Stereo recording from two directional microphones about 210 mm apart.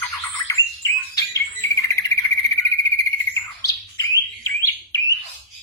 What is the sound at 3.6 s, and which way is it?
Bird, 15° left (ahead or behind).